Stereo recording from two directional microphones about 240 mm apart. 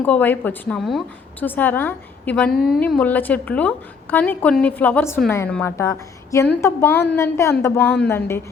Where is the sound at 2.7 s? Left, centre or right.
Centre.